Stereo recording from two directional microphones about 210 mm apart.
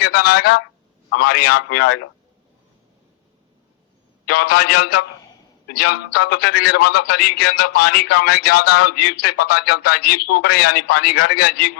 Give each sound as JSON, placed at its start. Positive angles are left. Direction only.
{"t": 0.0, "sound": "a man's voice", "side_deg": 50}
{"t": 4.3, "sound": "a man's voice", "side_deg": 50}